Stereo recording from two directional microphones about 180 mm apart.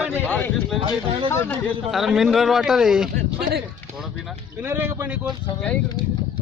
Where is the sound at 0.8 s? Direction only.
30° right (ahead or behind).